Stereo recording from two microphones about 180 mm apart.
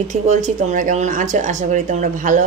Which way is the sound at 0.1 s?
40° right (ahead or behind).